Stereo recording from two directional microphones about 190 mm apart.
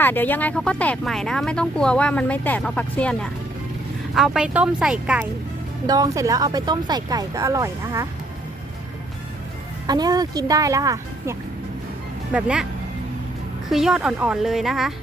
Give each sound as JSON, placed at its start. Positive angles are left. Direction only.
{"t": 0.0, "sound": "speech", "side_deg": 10}
{"t": 5.8, "sound": "speech", "side_deg": -20}
{"t": 9.8, "sound": "speech", "side_deg": -20}
{"t": 12.3, "sound": "speech", "side_deg": -5}
{"t": 13.7, "sound": "speech", "side_deg": 0}